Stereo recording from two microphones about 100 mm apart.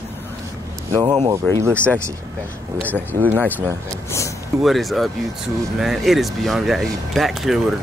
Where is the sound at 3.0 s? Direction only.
25° right (ahead or behind).